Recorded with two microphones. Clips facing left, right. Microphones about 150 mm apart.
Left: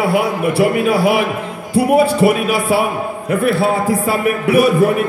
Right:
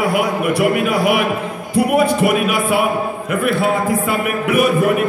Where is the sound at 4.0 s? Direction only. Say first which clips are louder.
Left 3 dB; 30° left (ahead or behind).